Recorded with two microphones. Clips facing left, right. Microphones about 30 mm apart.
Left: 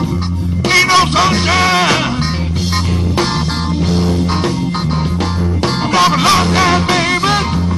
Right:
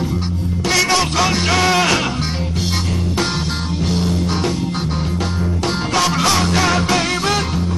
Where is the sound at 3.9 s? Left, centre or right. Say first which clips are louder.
Left 3 dB; centre.